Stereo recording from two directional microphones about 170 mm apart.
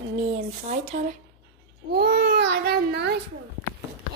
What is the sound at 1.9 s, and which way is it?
A child's voice, 70° right (ahead or behind).